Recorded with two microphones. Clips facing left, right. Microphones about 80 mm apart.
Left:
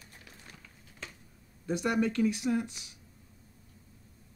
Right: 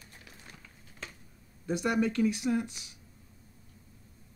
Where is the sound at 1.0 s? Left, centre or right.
Right.